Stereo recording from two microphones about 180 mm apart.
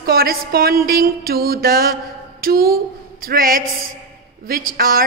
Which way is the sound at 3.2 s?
55° right (ahead or behind).